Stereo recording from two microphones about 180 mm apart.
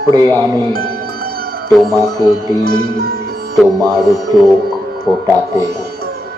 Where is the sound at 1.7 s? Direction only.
Centre (ahead or behind).